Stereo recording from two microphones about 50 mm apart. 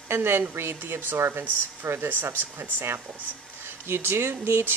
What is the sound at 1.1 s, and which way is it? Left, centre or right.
Speech, right.